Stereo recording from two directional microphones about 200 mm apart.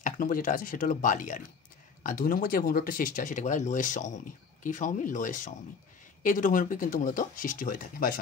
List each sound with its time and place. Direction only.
0.0 s speech: 45° left (ahead or behind)